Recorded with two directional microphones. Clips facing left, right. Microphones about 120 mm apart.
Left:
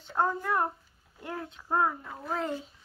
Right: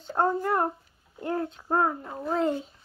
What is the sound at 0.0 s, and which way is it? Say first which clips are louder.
A child's voice: right 4 dB; 35° right (ahead or behind).